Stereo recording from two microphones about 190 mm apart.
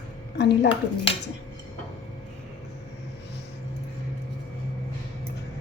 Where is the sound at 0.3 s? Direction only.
65° left (ahead or behind).